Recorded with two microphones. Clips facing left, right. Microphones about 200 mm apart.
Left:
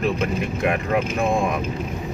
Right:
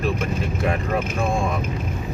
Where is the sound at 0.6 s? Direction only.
15° left (ahead or behind).